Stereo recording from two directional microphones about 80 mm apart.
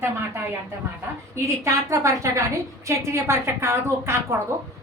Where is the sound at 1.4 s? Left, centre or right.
Right.